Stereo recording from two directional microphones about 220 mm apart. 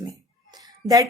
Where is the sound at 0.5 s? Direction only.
15° right (ahead or behind).